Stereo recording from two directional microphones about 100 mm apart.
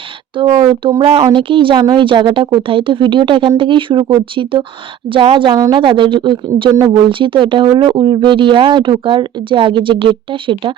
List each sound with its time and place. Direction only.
0.5 s speech: 50° right (ahead or behind)
5.5 s speech: 40° right (ahead or behind)
5.8 s speech: 55° right (ahead or behind)